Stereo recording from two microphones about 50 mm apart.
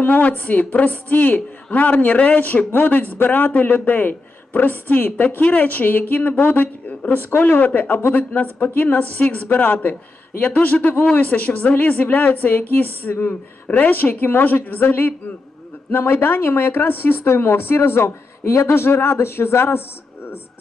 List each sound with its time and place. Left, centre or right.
0.0 s a woman's voice: left
2.7 s a woman's voice: left
7.0 s a woman's voice: left
13.3 s a woman's voice: left
18.5 s a man's voice: left